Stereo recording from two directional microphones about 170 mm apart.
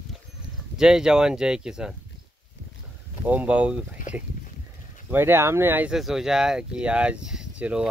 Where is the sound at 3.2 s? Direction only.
10° right (ahead or behind).